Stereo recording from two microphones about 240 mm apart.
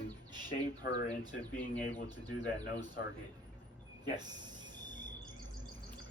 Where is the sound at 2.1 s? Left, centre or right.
Centre.